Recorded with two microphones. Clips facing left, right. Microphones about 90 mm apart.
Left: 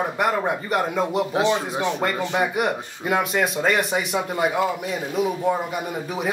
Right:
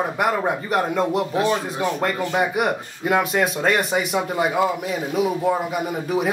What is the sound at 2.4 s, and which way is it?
Speech, centre (ahead or behind).